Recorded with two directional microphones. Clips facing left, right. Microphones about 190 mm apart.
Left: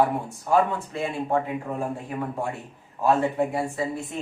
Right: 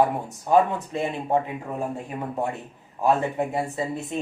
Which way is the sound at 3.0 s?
20° right (ahead or behind).